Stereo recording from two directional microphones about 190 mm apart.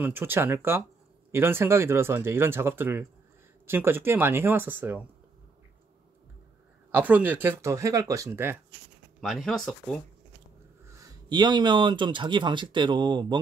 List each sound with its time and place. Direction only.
0.0 s speech: 10° right (ahead or behind)
6.9 s speech: 10° right (ahead or behind)
9.2 s speech: centre (ahead or behind)
11.0 s speech: 20° right (ahead or behind)